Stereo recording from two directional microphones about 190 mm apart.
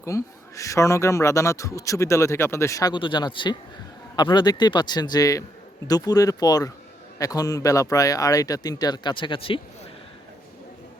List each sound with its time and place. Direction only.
0.0 s a man's voice: 15° left (ahead or behind)